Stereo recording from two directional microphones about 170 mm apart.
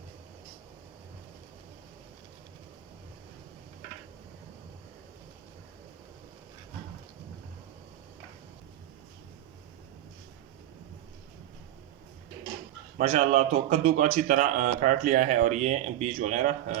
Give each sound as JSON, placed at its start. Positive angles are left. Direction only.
{"t": 13.0, "sound": "a man's voice", "side_deg": -45}